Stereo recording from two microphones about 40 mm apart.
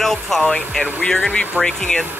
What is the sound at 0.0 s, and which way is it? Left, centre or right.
Speech, centre.